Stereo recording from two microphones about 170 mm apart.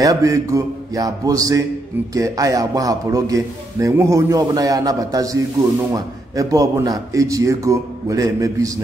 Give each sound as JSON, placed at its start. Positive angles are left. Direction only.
{"t": 0.0, "sound": "a man's voice", "side_deg": -20}